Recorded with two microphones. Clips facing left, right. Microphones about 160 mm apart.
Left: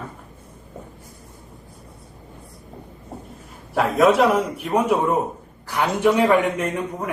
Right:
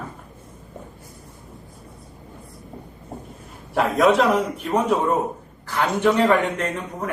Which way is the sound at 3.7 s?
Centre (ahead or behind).